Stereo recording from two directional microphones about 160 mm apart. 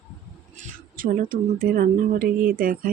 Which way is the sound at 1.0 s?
60° right (ahead or behind).